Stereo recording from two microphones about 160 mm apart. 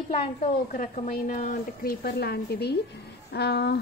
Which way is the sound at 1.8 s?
70° left (ahead or behind).